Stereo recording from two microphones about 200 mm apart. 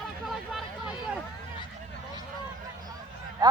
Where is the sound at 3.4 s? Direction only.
20° right (ahead or behind).